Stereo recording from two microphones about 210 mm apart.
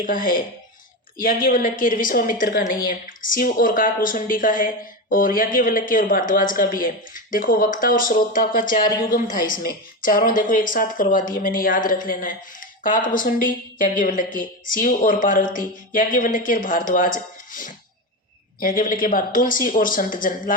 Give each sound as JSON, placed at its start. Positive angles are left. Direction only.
{"t": 0.0, "sound": "a woman's voice", "side_deg": 40}